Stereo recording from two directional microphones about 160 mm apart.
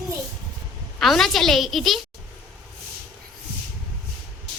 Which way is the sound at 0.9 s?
Centre (ahead or behind).